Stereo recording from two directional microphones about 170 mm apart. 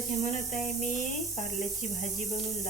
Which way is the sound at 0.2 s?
45° left (ahead or behind).